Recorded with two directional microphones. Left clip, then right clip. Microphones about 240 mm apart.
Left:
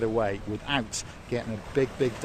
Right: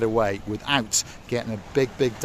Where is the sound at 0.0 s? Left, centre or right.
Right.